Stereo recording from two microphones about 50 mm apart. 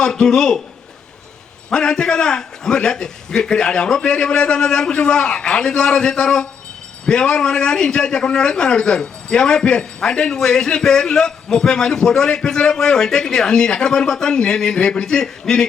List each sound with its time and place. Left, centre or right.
0.0 s a man's voice: centre
1.7 s a man's voice: centre